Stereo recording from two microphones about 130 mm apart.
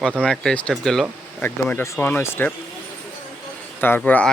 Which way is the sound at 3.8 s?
15° left (ahead or behind).